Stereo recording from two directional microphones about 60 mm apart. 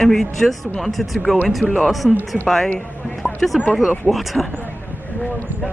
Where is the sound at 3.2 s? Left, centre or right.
Centre.